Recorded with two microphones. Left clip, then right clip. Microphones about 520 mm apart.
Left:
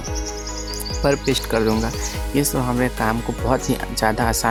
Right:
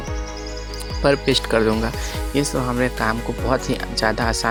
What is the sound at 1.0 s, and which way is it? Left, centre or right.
Speech, left.